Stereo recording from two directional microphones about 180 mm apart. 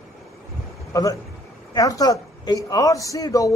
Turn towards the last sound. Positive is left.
turn(degrees=20)  # may be behind; listen again after turning